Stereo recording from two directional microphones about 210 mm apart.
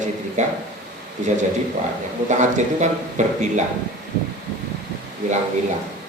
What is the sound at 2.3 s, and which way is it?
Speech, 35° right (ahead or behind).